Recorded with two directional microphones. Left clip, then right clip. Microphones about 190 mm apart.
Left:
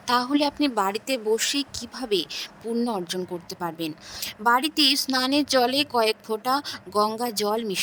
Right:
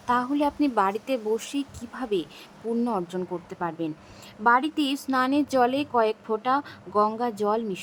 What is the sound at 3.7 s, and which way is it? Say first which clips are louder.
Speech: left 1 dB; 60° left (ahead or behind).